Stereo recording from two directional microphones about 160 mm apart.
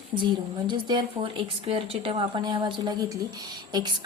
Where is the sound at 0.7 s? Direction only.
30° right (ahead or behind).